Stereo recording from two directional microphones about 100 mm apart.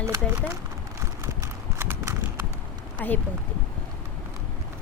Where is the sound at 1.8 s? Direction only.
25° right (ahead or behind).